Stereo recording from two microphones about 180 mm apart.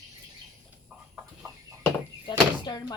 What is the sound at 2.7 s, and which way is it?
Speech, 20° left (ahead or behind).